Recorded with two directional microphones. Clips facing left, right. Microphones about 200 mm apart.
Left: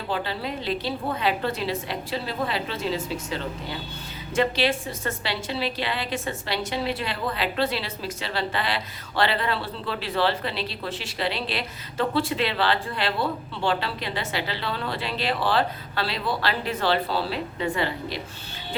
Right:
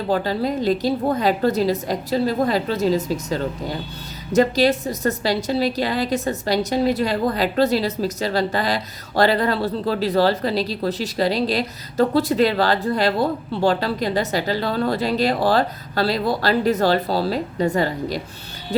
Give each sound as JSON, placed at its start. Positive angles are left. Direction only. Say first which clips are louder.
{"t": 0.1, "sound": "a woman's voice", "louder": "right 8 dB", "side_deg": -40}